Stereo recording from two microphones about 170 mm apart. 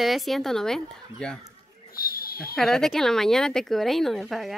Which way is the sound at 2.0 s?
60° left (ahead or behind).